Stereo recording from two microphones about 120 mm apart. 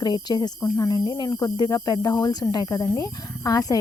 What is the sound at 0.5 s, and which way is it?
Speech, 25° left (ahead or behind).